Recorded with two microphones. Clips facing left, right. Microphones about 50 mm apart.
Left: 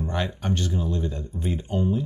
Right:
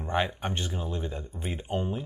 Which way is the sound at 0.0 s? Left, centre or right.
Centre.